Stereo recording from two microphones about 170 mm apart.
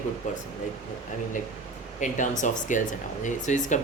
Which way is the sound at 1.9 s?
45° left (ahead or behind).